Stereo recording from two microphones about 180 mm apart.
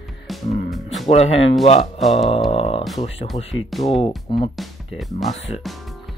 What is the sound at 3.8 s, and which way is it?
Speech, 30° left (ahead or behind).